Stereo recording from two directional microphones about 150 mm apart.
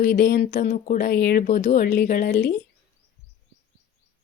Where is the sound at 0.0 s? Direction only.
60° left (ahead or behind); by 2.5 s 75° left (ahead or behind).